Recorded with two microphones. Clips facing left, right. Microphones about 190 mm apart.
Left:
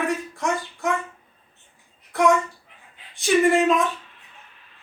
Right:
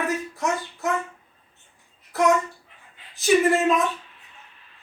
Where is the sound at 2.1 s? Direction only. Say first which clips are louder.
Left 1 dB; centre (ahead or behind).